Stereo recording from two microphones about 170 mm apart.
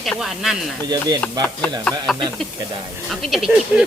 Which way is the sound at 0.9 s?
25° right (ahead or behind).